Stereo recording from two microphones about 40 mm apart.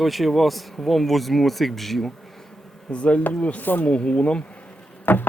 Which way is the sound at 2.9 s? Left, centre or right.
Left.